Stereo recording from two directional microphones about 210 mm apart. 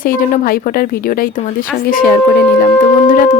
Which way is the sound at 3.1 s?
40° left (ahead or behind).